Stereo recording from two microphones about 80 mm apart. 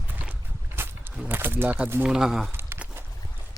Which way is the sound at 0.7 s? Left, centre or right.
Right.